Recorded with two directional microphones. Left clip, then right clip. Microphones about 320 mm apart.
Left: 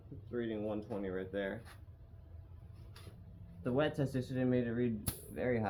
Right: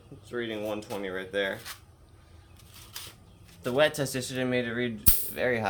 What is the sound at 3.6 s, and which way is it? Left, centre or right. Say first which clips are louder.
Speech: right 10 dB; centre.